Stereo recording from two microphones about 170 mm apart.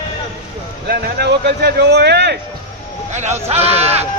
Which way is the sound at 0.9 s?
70° right (ahead or behind).